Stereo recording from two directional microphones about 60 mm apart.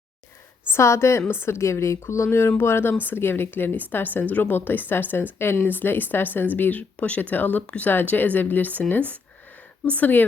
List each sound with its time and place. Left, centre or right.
0.7 s a woman's voice: left